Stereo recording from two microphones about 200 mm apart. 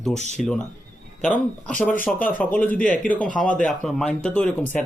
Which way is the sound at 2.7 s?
40° left (ahead or behind).